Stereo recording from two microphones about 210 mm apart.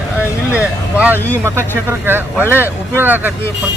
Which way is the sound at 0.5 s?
5° right (ahead or behind).